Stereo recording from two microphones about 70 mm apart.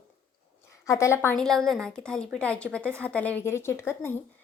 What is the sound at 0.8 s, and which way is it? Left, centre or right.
Speech, left.